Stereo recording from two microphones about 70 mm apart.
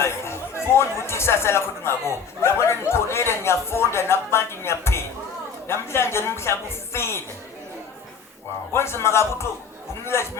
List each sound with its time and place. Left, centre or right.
0.0 s speech: left
8.7 s speech: left